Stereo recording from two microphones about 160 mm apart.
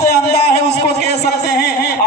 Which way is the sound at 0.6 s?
90° left.